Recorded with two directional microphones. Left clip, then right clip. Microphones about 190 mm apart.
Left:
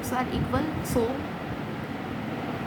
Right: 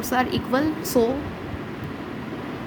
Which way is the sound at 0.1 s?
35° right (ahead or behind).